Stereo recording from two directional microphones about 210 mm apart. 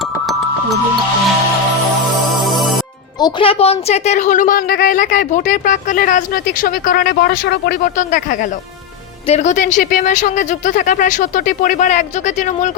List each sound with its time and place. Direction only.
2.4 s music: centre (ahead or behind)
3.2 s a woman's voice: 20° left (ahead or behind); by 7.8 s 50° left (ahead or behind)
7.9 s a woman's voice: 40° left (ahead or behind)